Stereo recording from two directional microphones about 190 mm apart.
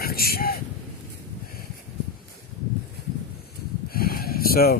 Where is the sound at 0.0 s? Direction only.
50° left (ahead or behind).